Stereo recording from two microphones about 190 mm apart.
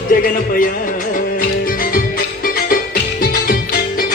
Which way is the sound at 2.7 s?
50° left (ahead or behind).